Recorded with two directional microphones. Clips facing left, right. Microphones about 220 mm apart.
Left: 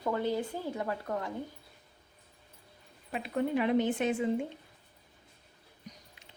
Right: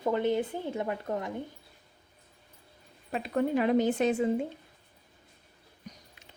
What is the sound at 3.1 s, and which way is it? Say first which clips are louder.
A woman's voice: right 3 dB; 40° right (ahead or behind).